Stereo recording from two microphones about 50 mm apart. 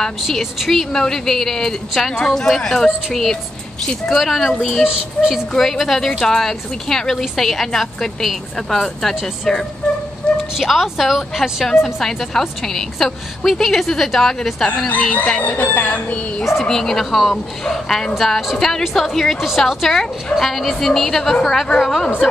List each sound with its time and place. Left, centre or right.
0.2 s a woman's voice: centre
5.5 s a woman's voice: centre
10.2 s a sound: left
10.6 s a woman's voice: centre
14.9 s speech: left
16.6 s a woman's voice: centre
19.4 s a woman's voice: centre